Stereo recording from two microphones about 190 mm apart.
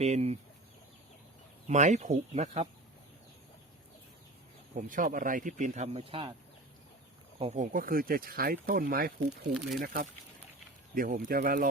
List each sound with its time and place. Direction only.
0.0 s speech: 35° right (ahead or behind)
1.6 s speech: 40° right (ahead or behind)
4.7 s speech: 45° right (ahead or behind); by 6.3 s 30° right (ahead or behind)
7.3 s speech: 35° right (ahead or behind)